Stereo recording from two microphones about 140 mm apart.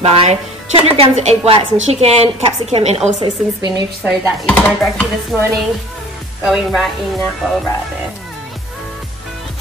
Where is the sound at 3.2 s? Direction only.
30° right (ahead or behind).